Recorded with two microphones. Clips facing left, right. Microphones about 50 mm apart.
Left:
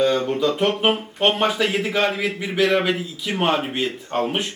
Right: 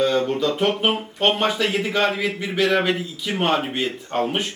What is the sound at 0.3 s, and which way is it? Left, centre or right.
A man's voice, centre.